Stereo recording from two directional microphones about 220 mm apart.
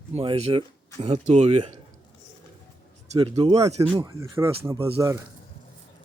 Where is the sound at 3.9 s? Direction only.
15° right (ahead or behind).